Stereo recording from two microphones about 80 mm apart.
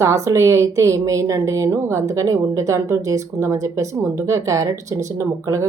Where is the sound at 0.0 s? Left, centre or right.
Right.